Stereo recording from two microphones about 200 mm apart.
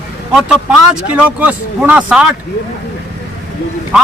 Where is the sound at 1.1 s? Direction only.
5° right (ahead or behind).